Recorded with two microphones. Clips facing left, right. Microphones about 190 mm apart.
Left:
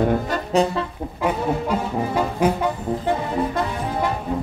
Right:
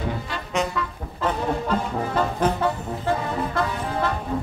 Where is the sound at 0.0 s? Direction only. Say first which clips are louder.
Left 9 dB; 55° left (ahead or behind).